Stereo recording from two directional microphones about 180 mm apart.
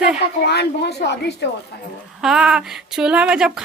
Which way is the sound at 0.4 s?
65° left (ahead or behind).